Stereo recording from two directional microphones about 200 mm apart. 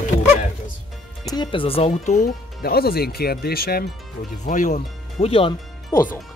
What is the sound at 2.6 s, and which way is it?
Speech, 50° left (ahead or behind).